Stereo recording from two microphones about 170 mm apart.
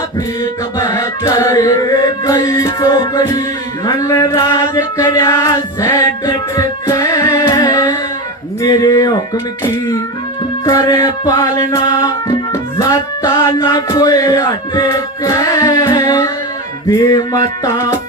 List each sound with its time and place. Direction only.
0.8 s music: 20° left (ahead or behind)
8.6 s speech: 20° left (ahead or behind)
10.7 s music: 20° left (ahead or behind)